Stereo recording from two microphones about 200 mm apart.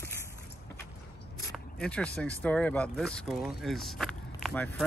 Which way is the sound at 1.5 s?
5° left (ahead or behind).